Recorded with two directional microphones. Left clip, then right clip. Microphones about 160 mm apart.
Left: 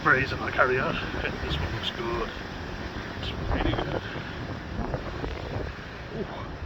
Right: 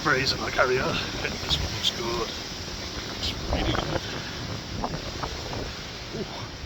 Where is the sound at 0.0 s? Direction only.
40° right (ahead or behind).